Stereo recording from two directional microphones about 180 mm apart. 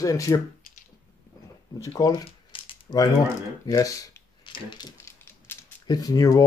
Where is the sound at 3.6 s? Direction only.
20° left (ahead or behind).